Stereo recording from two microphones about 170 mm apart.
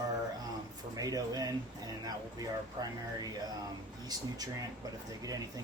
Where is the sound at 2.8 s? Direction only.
20° right (ahead or behind).